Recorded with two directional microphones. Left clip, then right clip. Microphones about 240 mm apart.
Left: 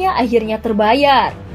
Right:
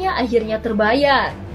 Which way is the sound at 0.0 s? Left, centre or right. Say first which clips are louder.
Left 4 dB; left.